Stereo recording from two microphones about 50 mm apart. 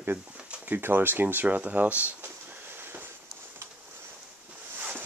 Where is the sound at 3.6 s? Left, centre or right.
Right.